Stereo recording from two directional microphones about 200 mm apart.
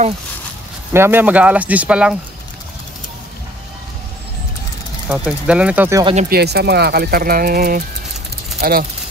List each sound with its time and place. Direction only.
0.9 s speech: 10° right (ahead or behind)
5.0 s speech: 5° right (ahead or behind)
6.2 s speech: 55° right (ahead or behind)